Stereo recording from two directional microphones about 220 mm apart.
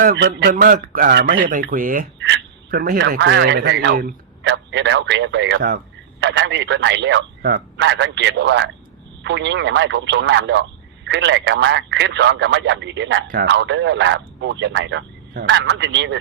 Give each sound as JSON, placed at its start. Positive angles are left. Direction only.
{"t": 0.2, "sound": "a man's voice", "side_deg": -50}
{"t": 0.5, "sound": "a man's voice", "side_deg": -40}
{"t": 2.1, "sound": "a sound", "side_deg": -50}
{"t": 3.0, "sound": "a man's voice", "side_deg": -55}
{"t": 13.2, "sound": "a man's voice", "side_deg": -45}